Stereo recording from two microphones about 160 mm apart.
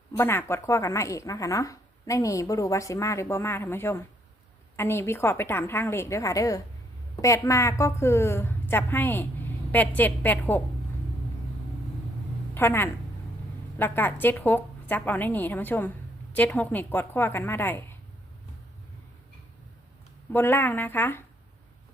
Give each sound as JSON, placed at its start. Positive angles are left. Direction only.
{"t": 0.2, "sound": "a woman's voice", "side_deg": 15}
{"t": 12.5, "sound": "a woman's voice", "side_deg": 15}
{"t": 20.3, "sound": "a woman's voice", "side_deg": 15}